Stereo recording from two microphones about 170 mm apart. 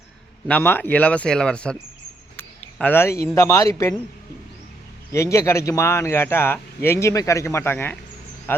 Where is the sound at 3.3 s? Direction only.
15° left (ahead or behind).